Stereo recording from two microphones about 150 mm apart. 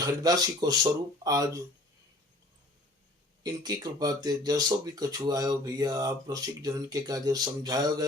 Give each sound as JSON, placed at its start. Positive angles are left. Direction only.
{"t": 0.0, "sound": "speech", "side_deg": -25}
{"t": 3.4, "sound": "speech", "side_deg": -25}